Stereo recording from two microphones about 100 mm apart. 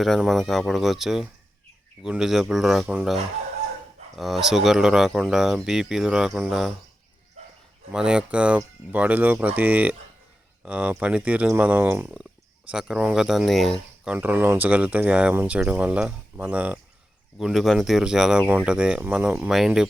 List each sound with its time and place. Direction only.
0.0 s speech: centre (ahead or behind)
7.9 s speech: 10° right (ahead or behind)
14.0 s speech: 15° right (ahead or behind)
17.3 s speech: centre (ahead or behind)
18.4 s speech: 20° right (ahead or behind)